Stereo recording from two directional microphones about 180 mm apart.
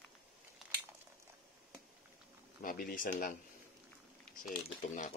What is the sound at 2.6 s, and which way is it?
Speech, 50° left (ahead or behind).